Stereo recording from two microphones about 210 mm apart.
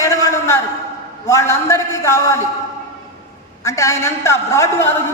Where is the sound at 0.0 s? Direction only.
15° left (ahead or behind).